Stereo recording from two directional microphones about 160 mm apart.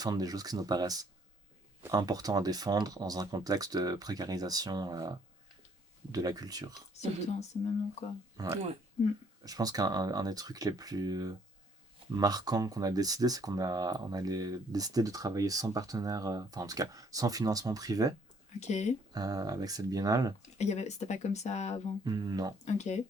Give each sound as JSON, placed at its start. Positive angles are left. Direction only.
{"t": 0.0, "sound": "speech", "side_deg": -25}
{"t": 8.4, "sound": "speech", "side_deg": -20}
{"t": 18.6, "sound": "speech", "side_deg": 45}
{"t": 19.1, "sound": "speech", "side_deg": -25}
{"t": 20.6, "sound": "speech", "side_deg": 45}
{"t": 22.0, "sound": "speech", "side_deg": -25}
{"t": 22.6, "sound": "speech", "side_deg": 45}